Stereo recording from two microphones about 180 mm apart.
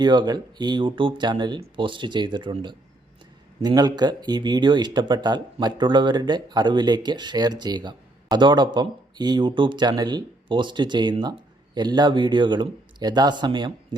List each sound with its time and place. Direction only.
0.0 s speech: 25° right (ahead or behind)